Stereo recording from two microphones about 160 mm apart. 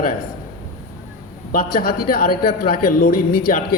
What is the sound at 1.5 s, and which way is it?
A man's voice, 65° left (ahead or behind).